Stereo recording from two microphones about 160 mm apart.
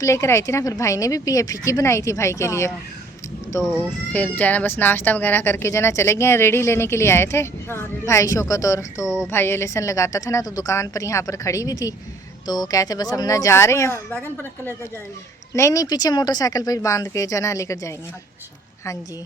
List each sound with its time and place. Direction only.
0.0 s speech: 20° left (ahead or behind)
3.6 s speech: 5° right (ahead or behind)
4.1 s a woman's voice: 10° left (ahead or behind)
15.5 s speech: 20° left (ahead or behind)